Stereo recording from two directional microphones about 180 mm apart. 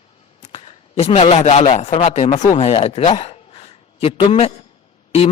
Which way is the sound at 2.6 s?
30° left (ahead or behind).